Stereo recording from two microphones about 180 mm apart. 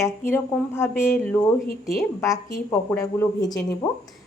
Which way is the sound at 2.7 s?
15° left (ahead or behind).